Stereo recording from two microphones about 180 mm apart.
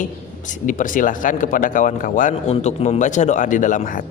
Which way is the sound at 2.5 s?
35° left (ahead or behind).